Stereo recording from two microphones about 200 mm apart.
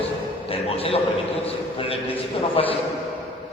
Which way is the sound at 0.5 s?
30° left (ahead or behind).